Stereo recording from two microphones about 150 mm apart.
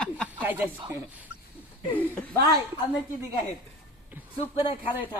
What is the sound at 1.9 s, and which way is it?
Speech, 10° left (ahead or behind).